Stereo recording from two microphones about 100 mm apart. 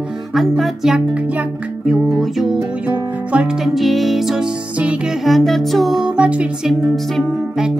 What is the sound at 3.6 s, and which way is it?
Music, centre (ahead or behind).